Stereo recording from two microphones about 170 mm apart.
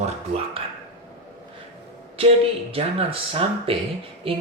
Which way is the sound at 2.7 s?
35° right (ahead or behind).